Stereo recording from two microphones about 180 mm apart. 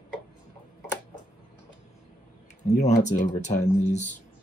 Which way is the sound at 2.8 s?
40° left (ahead or behind).